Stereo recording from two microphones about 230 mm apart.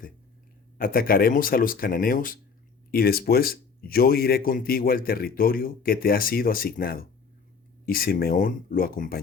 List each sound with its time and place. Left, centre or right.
0.8 s speech: left